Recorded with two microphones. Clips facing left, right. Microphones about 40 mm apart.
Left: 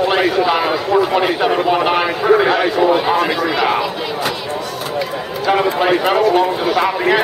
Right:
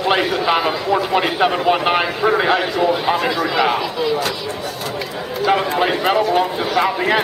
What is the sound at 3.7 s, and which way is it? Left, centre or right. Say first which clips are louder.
Speech: even; centre.